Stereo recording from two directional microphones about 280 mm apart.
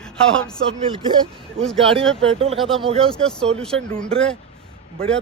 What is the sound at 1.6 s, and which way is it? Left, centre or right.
Speech, centre.